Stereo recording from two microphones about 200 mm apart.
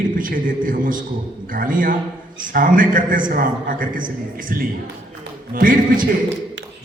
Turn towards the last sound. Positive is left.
turn(degrees=-45)  # may be behind; listen again after turning